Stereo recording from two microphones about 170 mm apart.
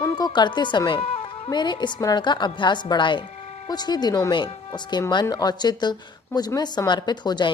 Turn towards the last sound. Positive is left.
turn(degrees=25)  # may be behind; listen again after turning